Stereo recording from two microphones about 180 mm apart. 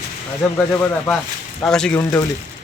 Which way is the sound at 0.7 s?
10° left (ahead or behind).